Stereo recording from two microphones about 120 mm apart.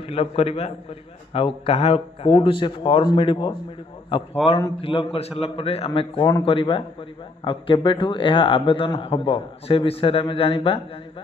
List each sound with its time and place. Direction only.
0.0 s a man's voice: 55° left (ahead or behind)
4.4 s a man's voice: 5° right (ahead or behind)
4.7 s a man's voice: 55° left (ahead or behind)